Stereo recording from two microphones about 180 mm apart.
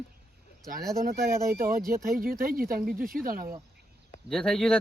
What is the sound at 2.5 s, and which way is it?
Speech, 55° right (ahead or behind).